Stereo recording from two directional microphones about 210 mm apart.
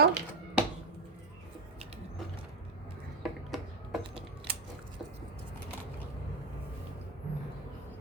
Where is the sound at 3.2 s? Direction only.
Centre (ahead or behind).